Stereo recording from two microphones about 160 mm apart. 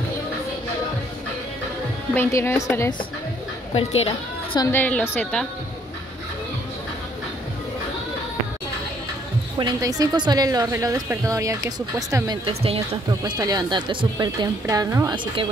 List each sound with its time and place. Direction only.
2.1 s a woman's voice: 15° left (ahead or behind)
3.7 s speech: 40° left (ahead or behind)
4.7 s a woman's voice: 10° left (ahead or behind)
9.6 s a woman's voice: 25° right (ahead or behind)
12.4 s speech: 35° right (ahead or behind)
13.2 s a woman's voice: 25° right (ahead or behind)